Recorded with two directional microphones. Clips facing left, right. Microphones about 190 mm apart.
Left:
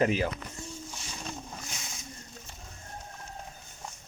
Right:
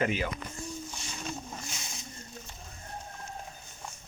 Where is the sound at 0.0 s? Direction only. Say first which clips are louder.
Left 3 dB; 35° left (ahead or behind).